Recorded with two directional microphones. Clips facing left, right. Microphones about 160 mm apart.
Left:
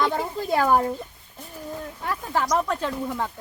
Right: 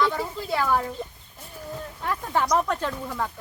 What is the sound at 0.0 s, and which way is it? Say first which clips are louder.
Speech: left 1 dB; 45° left (ahead or behind).